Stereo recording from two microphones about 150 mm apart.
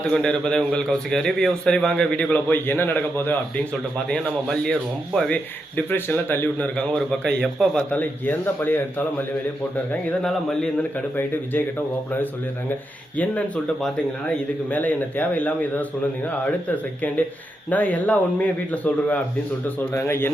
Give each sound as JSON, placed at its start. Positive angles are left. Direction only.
{"t": 0.1, "sound": "a man's voice", "side_deg": 5}
{"t": 3.9, "sound": "a man's voice", "side_deg": 5}
{"t": 14.3, "sound": "a man's voice", "side_deg": 10}